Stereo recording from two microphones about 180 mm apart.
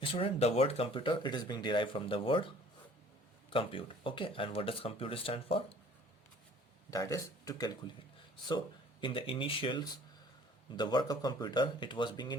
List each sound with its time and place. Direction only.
0.0 s speech: 30° left (ahead or behind)
3.5 s speech: 30° left (ahead or behind)
6.9 s speech: 20° left (ahead or behind)